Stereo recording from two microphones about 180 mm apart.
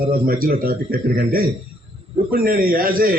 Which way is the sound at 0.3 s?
55° right (ahead or behind).